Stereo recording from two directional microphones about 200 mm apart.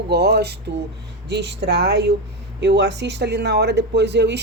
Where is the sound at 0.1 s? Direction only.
55° right (ahead or behind).